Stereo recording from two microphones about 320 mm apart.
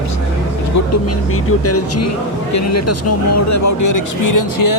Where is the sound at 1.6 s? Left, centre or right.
Left.